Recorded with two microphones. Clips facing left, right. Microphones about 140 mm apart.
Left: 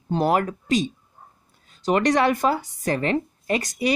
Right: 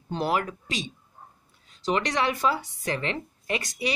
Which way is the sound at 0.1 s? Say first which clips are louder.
Left 6 dB; 45° left (ahead or behind).